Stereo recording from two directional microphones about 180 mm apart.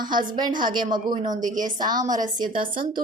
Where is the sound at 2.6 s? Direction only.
50° right (ahead or behind).